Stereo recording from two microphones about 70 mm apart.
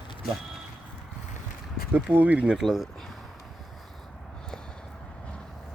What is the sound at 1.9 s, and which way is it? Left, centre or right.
Speech, right.